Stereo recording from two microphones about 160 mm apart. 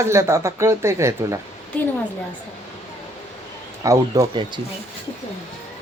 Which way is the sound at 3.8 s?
25° right (ahead or behind).